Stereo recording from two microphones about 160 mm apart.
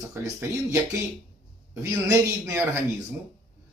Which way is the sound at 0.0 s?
15° right (ahead or behind).